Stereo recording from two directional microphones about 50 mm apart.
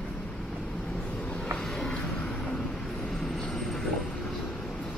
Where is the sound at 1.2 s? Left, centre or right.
Centre.